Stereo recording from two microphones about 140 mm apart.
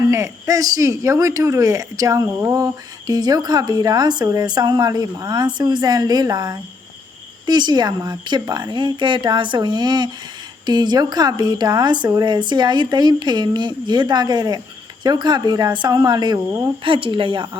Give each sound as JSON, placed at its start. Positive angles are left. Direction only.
{"t": 0.1, "sound": "speech", "side_deg": -20}
{"t": 16.5, "sound": "speech", "side_deg": -20}
{"t": 16.8, "sound": "speech", "side_deg": -40}